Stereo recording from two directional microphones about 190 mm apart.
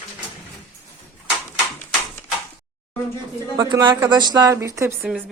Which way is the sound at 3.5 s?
20° right (ahead or behind).